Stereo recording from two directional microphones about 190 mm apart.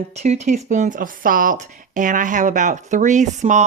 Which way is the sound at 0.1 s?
35° right (ahead or behind).